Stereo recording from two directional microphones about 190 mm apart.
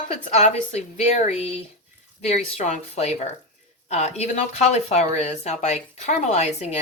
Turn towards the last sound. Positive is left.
turn(degrees=35)  # may be behind; listen again after turning